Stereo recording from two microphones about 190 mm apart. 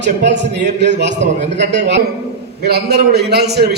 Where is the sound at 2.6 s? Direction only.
55° right (ahead or behind).